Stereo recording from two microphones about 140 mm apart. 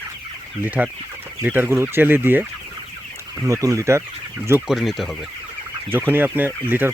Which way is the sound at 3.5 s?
25° right (ahead or behind).